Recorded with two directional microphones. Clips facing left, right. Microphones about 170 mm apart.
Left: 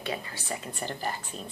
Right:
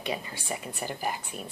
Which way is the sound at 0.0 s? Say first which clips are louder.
Right 1 dB; 15° right (ahead or behind).